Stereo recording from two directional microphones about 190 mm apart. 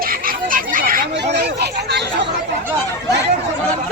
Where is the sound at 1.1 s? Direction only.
65° right (ahead or behind).